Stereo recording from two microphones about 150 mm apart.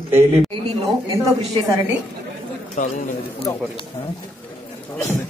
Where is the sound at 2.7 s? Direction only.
60° left (ahead or behind).